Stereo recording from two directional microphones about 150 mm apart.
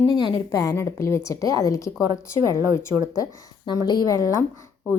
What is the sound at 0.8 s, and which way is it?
A woman's voice, 20° left (ahead or behind).